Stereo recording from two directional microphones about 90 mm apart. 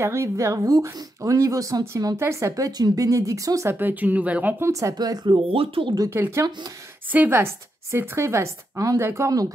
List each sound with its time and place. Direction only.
0.0 s speech: 30° right (ahead or behind)
3.7 s speech: 20° right (ahead or behind)
4.6 s speech: 35° right (ahead or behind)
4.9 s speech: 50° right (ahead or behind)
5.5 s speech: 80° right
6.0 s speech: 30° right (ahead or behind)